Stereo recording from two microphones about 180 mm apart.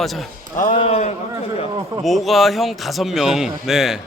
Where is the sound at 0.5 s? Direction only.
45° left (ahead or behind).